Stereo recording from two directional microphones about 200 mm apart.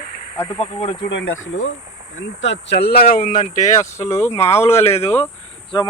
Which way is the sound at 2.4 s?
60° left (ahead or behind).